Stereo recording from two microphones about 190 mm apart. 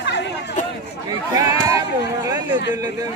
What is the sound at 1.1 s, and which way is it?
Speech, 20° right (ahead or behind).